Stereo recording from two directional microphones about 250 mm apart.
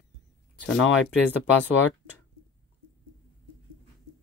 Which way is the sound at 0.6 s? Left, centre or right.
Left.